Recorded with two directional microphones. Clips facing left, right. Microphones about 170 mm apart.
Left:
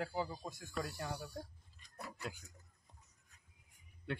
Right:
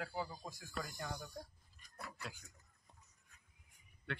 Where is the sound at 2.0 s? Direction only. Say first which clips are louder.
Left 4 dB; 20° left (ahead or behind).